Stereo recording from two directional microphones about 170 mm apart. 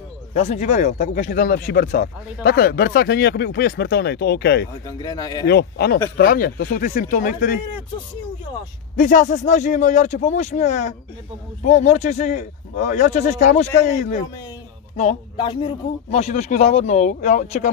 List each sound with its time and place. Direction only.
0.3 s speech: 40° left (ahead or behind)
1.7 s speech: 75° left (ahead or behind)
2.4 s speech: 65° left (ahead or behind)
4.8 s speech: 20° left (ahead or behind)
5.5 s speech: 75° left (ahead or behind)
6.1 s speech: 60° left (ahead or behind)
8.9 s speech: 50° left (ahead or behind)
15.3 s a man's voice: 30° left (ahead or behind); by 17.6 s 45° left (ahead or behind)